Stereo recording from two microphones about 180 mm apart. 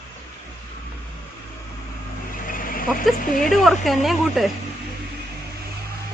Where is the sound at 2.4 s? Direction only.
50° left (ahead or behind).